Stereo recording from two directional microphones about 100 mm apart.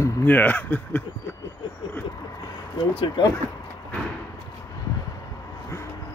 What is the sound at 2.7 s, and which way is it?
Speech, 50° left (ahead or behind).